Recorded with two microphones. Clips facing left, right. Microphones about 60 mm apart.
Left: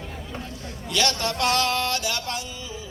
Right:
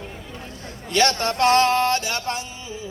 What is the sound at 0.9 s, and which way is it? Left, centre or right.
A man's voice, right.